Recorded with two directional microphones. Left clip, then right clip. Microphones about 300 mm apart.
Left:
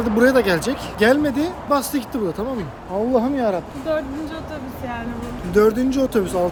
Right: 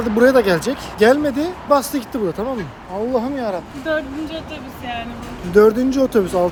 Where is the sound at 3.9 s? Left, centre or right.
Right.